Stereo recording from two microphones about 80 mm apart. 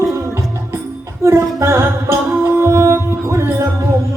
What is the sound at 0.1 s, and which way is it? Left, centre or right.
Music, right.